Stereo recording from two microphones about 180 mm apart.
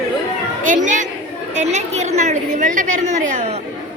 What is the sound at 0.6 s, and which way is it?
A woman's voice, 45° right (ahead or behind).